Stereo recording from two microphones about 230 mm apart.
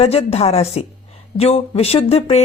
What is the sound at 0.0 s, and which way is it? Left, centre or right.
Speech, left.